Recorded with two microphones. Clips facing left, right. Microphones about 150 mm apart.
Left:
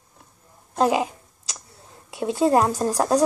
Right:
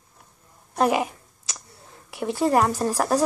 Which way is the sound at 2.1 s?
20° left (ahead or behind).